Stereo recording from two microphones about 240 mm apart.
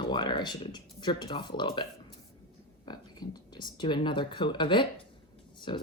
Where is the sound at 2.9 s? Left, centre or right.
Centre.